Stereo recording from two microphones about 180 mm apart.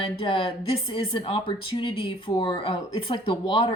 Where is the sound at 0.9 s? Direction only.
30° left (ahead or behind).